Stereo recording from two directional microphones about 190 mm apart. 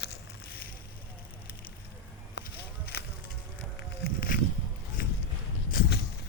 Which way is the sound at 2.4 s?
60° left (ahead or behind).